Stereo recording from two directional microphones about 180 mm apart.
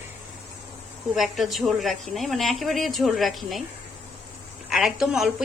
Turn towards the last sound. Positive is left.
turn(degrees=-5)  # may be behind; listen again after turning